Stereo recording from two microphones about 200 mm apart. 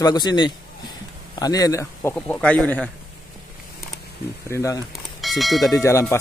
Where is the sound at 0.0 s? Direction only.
20° left (ahead or behind).